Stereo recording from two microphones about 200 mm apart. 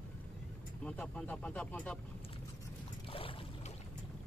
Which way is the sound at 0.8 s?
5° left (ahead or behind).